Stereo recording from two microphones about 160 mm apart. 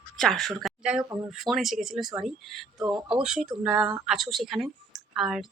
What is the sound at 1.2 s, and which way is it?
Speech, centre (ahead or behind).